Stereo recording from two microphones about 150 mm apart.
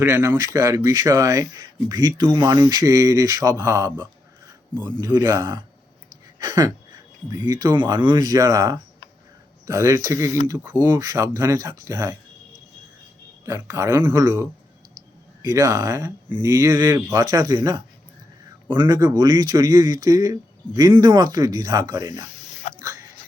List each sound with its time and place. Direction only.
0.0 s speech: 20° right (ahead or behind)
4.7 s a man's voice: 5° left (ahead or behind)
4.9 s speech: 20° right (ahead or behind)
6.1 s a sound: 25° right (ahead or behind)
7.3 s speech: 25° right (ahead or behind)
13.4 s speech: 20° right (ahead or behind)
22.8 s a sound: 20° right (ahead or behind)